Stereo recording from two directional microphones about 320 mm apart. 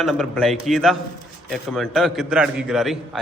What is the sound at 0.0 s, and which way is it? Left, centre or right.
A man's voice, centre.